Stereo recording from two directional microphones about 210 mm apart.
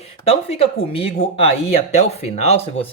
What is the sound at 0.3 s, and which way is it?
Speech, 30° left (ahead or behind).